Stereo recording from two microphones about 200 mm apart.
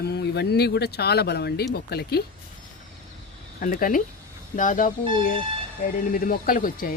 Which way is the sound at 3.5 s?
45° left (ahead or behind).